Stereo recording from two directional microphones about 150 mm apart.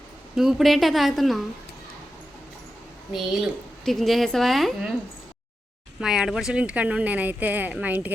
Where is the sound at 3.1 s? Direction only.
5° right (ahead or behind).